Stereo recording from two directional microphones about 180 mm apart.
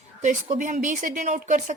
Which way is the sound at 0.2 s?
40° right (ahead or behind).